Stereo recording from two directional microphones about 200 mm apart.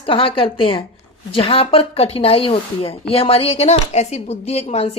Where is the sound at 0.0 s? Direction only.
25° left (ahead or behind).